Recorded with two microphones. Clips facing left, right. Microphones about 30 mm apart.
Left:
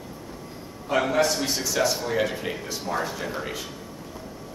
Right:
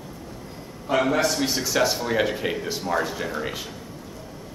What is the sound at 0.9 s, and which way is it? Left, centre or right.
A man's voice, centre.